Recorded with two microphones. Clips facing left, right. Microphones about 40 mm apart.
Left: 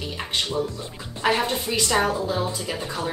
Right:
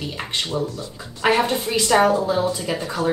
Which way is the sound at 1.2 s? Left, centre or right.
Right.